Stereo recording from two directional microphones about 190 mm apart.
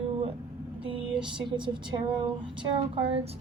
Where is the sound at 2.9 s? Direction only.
30° right (ahead or behind).